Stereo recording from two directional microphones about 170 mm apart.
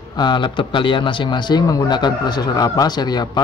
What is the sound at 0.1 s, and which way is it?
Speech, 25° left (ahead or behind).